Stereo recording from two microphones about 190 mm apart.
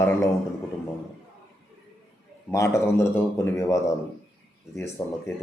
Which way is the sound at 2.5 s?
15° left (ahead or behind).